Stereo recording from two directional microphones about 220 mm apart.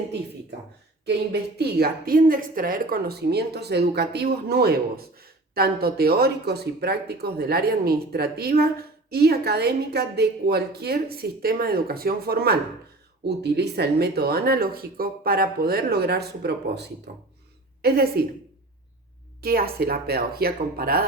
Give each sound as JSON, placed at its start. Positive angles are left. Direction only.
{"t": 1.0, "sound": "a woman's voice", "side_deg": -45}
{"t": 19.4, "sound": "a woman's voice", "side_deg": -45}